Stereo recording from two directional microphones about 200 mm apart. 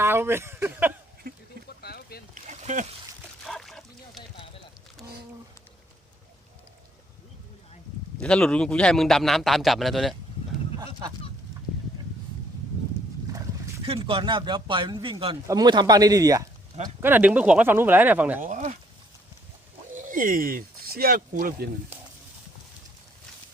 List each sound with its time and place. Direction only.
0.0 s speech: 10° right (ahead or behind)
1.2 s a sound: 50° right (ahead or behind)
1.8 s boat: 50° left (ahead or behind)
2.3 s boat: 35° right (ahead or behind)
3.4 s a sound: centre (ahead or behind)
8.2 s a man's voice: 5° left (ahead or behind)
13.8 s speech: 25° right (ahead or behind); by 18.4 s 10° right (ahead or behind)
18.4 s speech: 40° right (ahead or behind)
20.1 s speech: 45° right (ahead or behind)